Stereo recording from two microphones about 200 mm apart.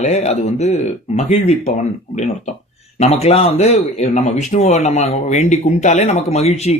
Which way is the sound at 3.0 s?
30° left (ahead or behind).